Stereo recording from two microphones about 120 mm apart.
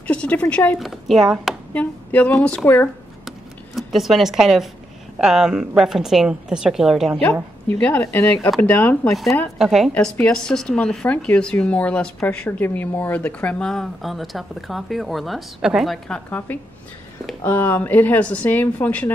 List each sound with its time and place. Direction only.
0.0 s speech: 10° left (ahead or behind)
0.7 s speech: centre (ahead or behind)
1.7 s a woman's voice: 15° left (ahead or behind)
3.3 s a sound: centre (ahead or behind)
5.2 s speech: 5° right (ahead or behind)
7.8 s a woman's voice: 15° left (ahead or behind)
9.1 s speech: centre (ahead or behind)
9.9 s a woman's voice: 10° left (ahead or behind)
16.3 s a woman's voice: 15° left (ahead or behind)